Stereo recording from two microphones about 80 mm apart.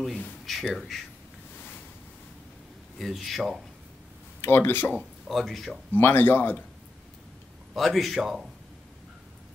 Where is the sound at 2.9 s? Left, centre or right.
Centre.